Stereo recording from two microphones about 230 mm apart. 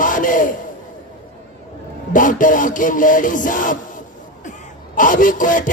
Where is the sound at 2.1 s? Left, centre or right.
Left.